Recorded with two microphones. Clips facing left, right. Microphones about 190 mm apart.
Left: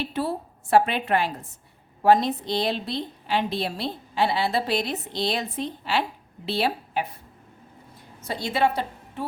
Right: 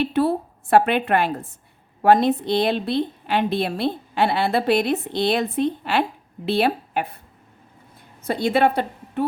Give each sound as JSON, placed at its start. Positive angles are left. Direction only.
{"t": 0.0, "sound": "a woman's voice", "side_deg": -60}
{"t": 8.2, "sound": "a woman's voice", "side_deg": -55}